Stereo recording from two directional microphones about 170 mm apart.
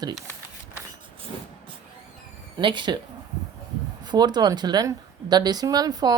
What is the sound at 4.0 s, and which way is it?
Speech, 25° right (ahead or behind).